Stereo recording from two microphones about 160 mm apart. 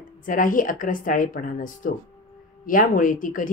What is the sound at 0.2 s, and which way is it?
Speech, 60° left (ahead or behind).